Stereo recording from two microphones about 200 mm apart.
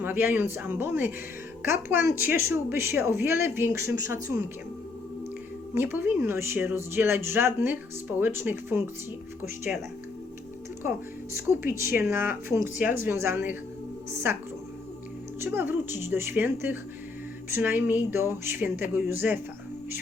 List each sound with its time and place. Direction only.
0.0 s speech: 10° right (ahead or behind)
5.7 s speech: 10° right (ahead or behind)
11.3 s speech: 15° right (ahead or behind)
15.4 s speech: 10° right (ahead or behind)